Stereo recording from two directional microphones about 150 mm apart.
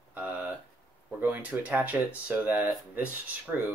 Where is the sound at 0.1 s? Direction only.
10° right (ahead or behind).